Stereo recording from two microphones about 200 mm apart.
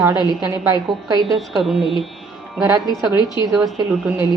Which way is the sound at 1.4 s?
Centre (ahead or behind).